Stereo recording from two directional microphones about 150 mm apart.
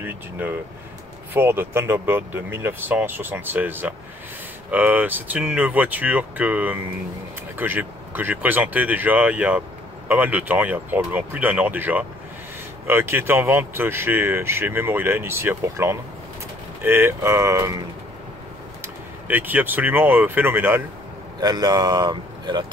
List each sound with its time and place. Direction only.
0.0 s speech: 15° right (ahead or behind)
18.8 s speech: 10° right (ahead or behind)
21.4 s speech: 25° right (ahead or behind)